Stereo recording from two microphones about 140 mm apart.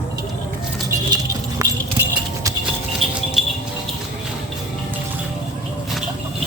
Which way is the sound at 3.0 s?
Centre (ahead or behind).